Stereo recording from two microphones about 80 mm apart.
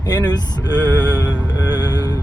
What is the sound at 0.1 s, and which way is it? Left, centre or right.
Music, left.